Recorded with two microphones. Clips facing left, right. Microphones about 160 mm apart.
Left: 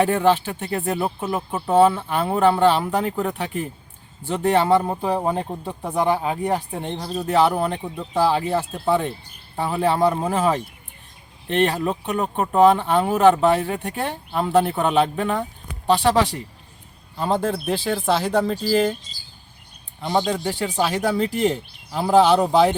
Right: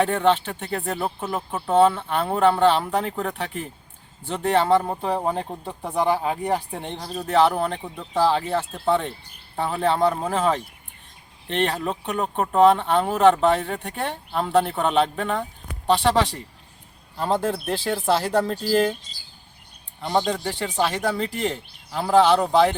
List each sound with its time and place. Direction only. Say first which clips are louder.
0.0 s speech: left 2 dB; 5° left (ahead or behind)
20.0 s speech: left 1 dB; 5° left (ahead or behind)